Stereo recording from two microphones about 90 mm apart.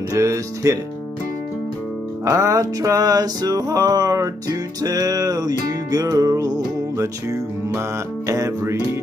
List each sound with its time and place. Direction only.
0.1 s music: 35° right (ahead or behind)
2.2 s music: 35° right (ahead or behind)
8.3 s music: 35° right (ahead or behind)